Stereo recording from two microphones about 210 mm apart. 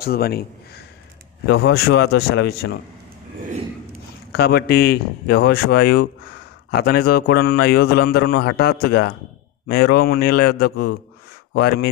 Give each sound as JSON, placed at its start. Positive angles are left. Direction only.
{"t": 0.0, "sound": "a man's voice", "side_deg": 45}
{"t": 4.3, "sound": "a man's voice", "side_deg": 50}